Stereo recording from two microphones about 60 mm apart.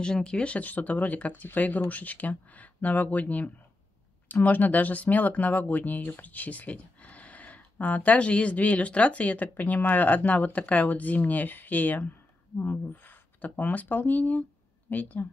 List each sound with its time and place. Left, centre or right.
0.0 s speech: centre; by 15.2 s left